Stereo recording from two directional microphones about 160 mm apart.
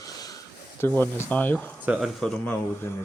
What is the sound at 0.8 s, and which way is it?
Speech, 10° left (ahead or behind).